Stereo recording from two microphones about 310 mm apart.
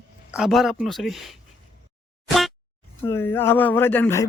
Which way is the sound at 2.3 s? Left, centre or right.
Centre.